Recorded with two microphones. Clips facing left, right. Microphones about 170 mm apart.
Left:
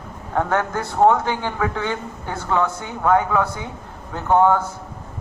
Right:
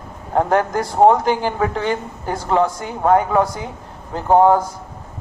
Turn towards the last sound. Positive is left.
turn(degrees=-35)  # may be behind; listen again after turning